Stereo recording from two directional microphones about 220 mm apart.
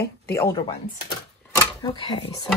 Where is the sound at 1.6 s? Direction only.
20° left (ahead or behind).